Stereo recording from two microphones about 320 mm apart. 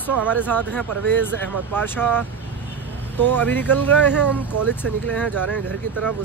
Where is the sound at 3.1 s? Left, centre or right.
Centre.